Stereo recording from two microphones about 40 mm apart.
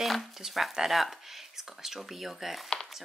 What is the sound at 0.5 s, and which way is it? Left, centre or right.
Speech, centre.